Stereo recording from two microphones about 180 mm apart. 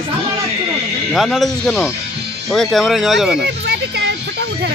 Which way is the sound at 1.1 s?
Centre (ahead or behind).